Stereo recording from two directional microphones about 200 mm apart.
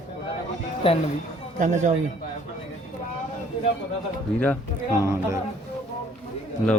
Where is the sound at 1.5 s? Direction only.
40° right (ahead or behind).